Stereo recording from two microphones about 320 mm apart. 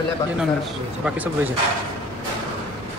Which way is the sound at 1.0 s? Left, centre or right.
Centre.